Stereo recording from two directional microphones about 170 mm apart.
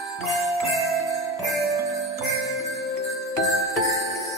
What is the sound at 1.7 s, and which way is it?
Music, 20° right (ahead or behind).